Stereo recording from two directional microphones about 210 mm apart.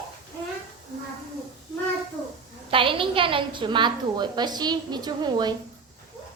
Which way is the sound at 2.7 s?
25° right (ahead or behind).